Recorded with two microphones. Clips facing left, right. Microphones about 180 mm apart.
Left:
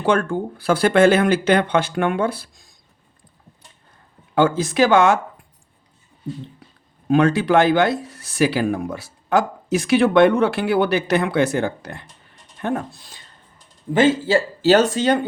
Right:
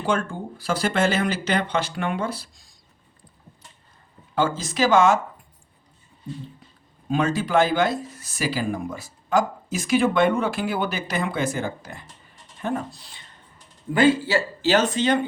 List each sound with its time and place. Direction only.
0.0 s speech: 65° left (ahead or behind)
4.4 s speech: 60° left (ahead or behind)
7.1 s speech: 70° left (ahead or behind)
13.9 s speech: 25° left (ahead or behind); by 15.2 s 40° left (ahead or behind)